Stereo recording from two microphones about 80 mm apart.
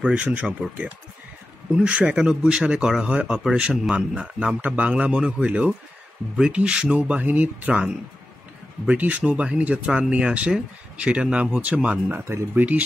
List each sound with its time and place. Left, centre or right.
0.0 s speech: centre